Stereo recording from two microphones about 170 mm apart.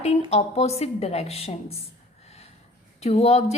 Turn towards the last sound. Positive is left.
turn(degrees=40)  # may be behind; listen again after turning